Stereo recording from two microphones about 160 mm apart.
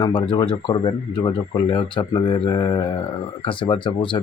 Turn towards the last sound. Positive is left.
turn(degrees=30)  # may be behind; listen again after turning